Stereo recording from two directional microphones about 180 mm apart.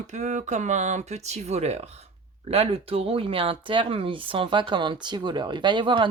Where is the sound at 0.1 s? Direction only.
40° right (ahead or behind).